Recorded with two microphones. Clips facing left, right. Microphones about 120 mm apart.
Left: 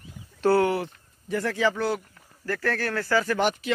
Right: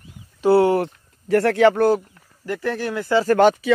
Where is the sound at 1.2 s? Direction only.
75° right (ahead or behind).